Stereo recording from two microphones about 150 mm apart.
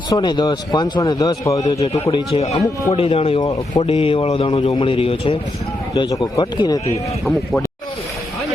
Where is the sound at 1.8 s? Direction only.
35° left (ahead or behind).